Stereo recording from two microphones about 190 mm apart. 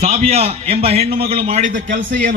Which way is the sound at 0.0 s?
35° right (ahead or behind).